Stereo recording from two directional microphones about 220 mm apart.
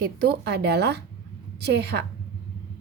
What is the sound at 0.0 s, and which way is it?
A woman's voice, 45° right (ahead or behind).